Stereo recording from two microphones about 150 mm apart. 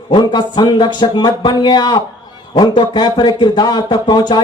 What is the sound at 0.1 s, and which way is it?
Speech, 30° left (ahead or behind).